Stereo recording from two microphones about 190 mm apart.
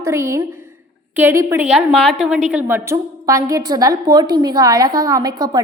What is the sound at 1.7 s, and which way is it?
A woman's voice, centre (ahead or behind).